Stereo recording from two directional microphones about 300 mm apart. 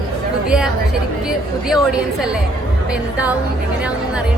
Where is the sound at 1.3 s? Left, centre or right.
Centre.